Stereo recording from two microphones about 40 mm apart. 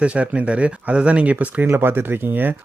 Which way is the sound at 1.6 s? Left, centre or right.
Right.